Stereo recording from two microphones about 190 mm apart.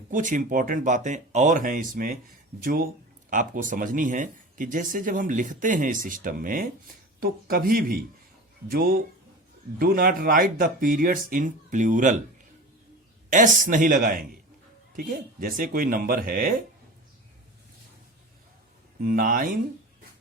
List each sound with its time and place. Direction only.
0.1 s speech: 40° right (ahead or behind)
13.6 s speech: 45° right (ahead or behind)
19.0 s speech: 50° right (ahead or behind)